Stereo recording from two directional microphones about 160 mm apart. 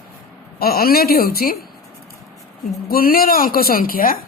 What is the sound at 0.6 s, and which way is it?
Speech, 70° left (ahead or behind).